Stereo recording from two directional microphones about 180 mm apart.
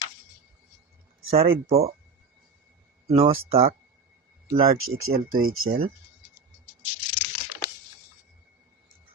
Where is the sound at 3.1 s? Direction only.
35° right (ahead or behind).